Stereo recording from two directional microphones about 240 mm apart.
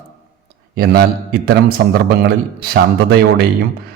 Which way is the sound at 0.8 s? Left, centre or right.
Right.